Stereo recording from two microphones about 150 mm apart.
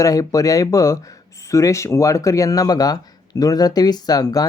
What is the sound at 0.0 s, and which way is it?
Speech, 25° left (ahead or behind).